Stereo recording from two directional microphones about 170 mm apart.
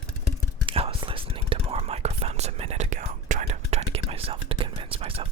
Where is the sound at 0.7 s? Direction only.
30° right (ahead or behind).